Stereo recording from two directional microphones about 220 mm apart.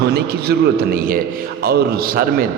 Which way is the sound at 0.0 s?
45° right (ahead or behind).